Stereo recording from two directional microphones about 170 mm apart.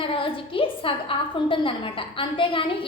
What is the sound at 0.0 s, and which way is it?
A woman's voice, 30° left (ahead or behind).